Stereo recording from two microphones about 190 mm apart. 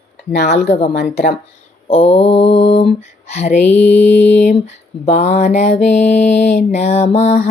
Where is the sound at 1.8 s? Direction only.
30° left (ahead or behind).